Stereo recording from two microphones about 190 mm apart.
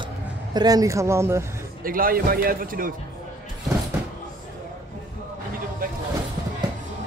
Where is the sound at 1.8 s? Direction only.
50° right (ahead or behind).